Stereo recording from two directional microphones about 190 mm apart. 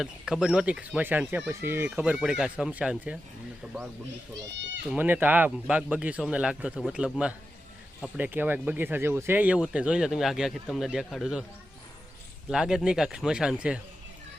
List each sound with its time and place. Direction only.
0.0 s speech: 5° right (ahead or behind)
4.9 s a man's voice: 10° right (ahead or behind)
12.5 s a man's voice: 5° right (ahead or behind)